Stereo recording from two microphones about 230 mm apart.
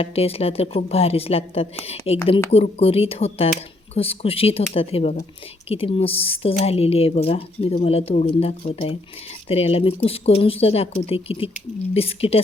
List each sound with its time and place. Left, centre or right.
0.0 s speech: left